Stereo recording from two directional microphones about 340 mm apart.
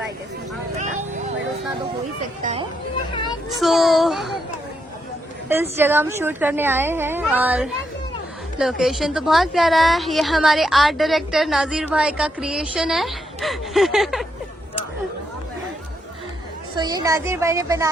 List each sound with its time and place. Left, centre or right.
2.4 s chatter: centre
3.5 s a child's voice: centre
5.7 s a woman's voice: centre
16.7 s a woman's voice: centre